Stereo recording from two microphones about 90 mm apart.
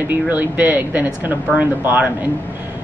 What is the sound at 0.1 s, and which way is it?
Speech, 20° right (ahead or behind).